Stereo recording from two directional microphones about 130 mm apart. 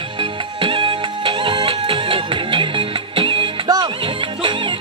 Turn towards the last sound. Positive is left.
turn(degrees=-40)  # may be behind; listen again after turning